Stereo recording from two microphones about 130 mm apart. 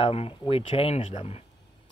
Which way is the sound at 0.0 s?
50° left (ahead or behind).